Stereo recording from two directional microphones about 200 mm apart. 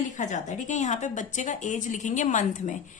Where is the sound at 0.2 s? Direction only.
35° left (ahead or behind).